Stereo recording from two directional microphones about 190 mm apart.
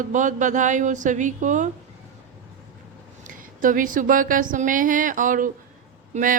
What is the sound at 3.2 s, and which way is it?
A woman's voice, 45° right (ahead or behind).